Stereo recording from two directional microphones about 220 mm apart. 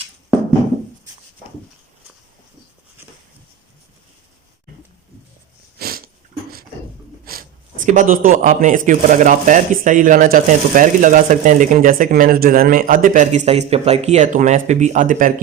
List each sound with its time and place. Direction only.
5.8 s sneeze: 45° right (ahead or behind)
7.9 s a man's voice: 35° right (ahead or behind)